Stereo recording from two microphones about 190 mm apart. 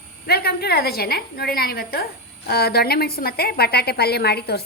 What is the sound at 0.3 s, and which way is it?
Speech, 55° left (ahead or behind).